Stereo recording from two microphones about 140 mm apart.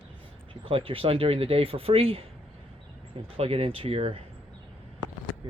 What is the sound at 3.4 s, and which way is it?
Speech, 45° right (ahead or behind).